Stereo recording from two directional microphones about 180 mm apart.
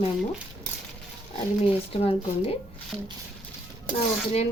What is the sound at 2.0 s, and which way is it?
Dishes, 35° left (ahead or behind).